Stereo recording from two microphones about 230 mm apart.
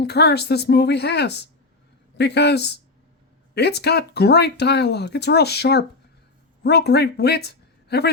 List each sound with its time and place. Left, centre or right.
0.0 s speech: left